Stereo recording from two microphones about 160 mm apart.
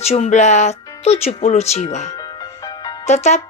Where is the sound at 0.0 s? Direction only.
45° left (ahead or behind).